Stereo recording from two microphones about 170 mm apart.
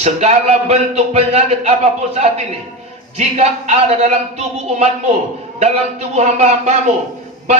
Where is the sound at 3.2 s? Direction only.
40° right (ahead or behind).